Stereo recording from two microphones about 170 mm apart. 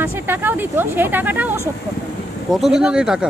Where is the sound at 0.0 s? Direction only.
10° right (ahead or behind).